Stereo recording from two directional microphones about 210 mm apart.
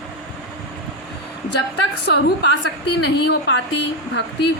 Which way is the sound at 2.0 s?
55° left (ahead or behind).